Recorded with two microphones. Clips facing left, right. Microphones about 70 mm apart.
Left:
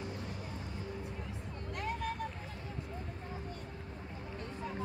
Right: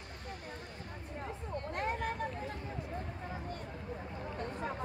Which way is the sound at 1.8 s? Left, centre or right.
Right.